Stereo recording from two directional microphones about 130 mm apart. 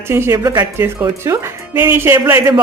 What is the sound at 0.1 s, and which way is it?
Speech, 20° right (ahead or behind).